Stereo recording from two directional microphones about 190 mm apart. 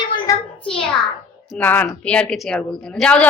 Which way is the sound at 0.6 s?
5° left (ahead or behind).